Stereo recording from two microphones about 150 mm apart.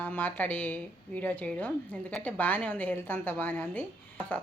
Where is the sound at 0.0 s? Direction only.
10° left (ahead or behind).